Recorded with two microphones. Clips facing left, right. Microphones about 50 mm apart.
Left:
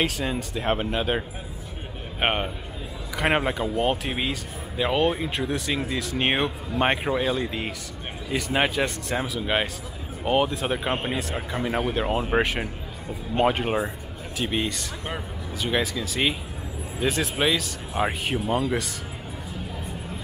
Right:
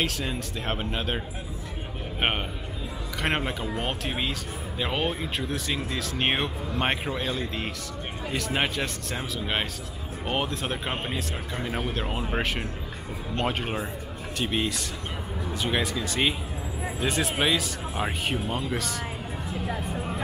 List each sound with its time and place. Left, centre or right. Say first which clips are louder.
0.0 s speech: left 3 dB; centre